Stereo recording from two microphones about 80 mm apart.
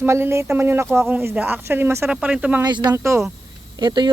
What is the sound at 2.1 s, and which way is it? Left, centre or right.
Speech, centre.